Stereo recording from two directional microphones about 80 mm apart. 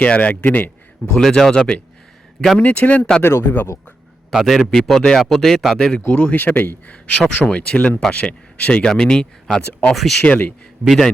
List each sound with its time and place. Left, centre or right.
0.0 s speech: centre
1.1 s speech: centre; by 3.7 s left
4.3 s a man's voice: centre
6.1 s speech: centre
6.9 s speech: centre
9.9 s a man's voice: centre
10.2 s speech: centre
10.8 s a man's voice: centre